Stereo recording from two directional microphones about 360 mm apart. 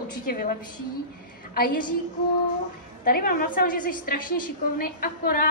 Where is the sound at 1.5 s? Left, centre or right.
Left.